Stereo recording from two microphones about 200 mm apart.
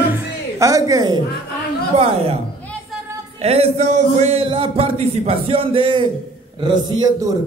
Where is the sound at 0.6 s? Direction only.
15° right (ahead or behind).